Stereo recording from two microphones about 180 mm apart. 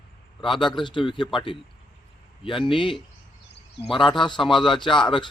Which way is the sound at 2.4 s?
30° left (ahead or behind).